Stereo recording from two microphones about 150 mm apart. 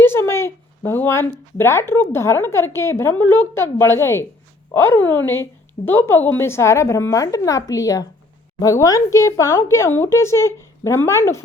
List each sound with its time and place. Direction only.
0.0 s speech: 15° left (ahead or behind)